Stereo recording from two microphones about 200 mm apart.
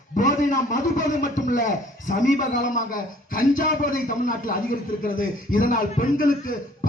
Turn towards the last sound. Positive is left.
turn(degrees=40)  # may be behind; listen again after turning